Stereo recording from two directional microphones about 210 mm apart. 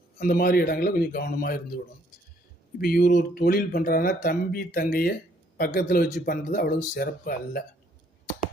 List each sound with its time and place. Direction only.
0.2 s speech: 45° left (ahead or behind)
2.7 s speech: 45° left (ahead or behind)